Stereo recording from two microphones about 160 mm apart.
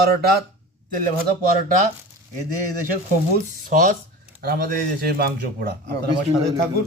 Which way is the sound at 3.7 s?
55° right (ahead or behind).